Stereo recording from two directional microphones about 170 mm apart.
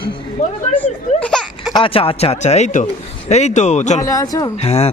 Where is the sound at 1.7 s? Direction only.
30° left (ahead or behind).